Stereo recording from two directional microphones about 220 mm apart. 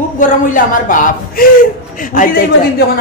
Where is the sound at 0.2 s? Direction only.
35° left (ahead or behind).